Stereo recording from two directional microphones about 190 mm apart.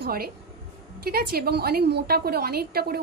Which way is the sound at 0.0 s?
50° right (ahead or behind).